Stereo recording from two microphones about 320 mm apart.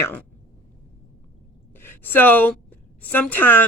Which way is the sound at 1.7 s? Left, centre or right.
Centre.